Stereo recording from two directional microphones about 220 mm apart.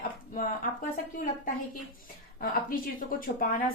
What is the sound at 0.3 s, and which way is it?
Speech, 40° left (ahead or behind).